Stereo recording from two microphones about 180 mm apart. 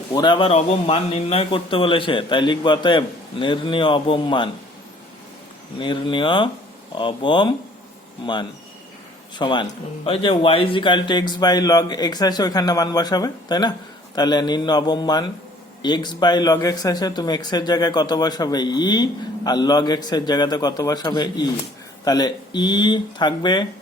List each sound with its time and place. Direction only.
0.1 s a man's voice: 25° left (ahead or behind)
5.8 s a man's voice: 25° left (ahead or behind)
9.4 s a man's voice: 25° left (ahead or behind)